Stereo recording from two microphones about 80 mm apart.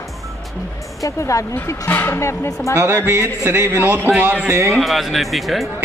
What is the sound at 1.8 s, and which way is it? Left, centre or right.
Speech, left.